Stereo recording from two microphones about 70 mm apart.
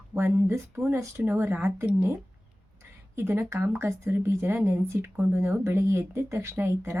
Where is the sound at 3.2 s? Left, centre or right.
Right.